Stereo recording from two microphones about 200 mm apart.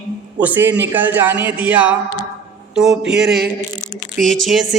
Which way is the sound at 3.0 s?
60° right (ahead or behind).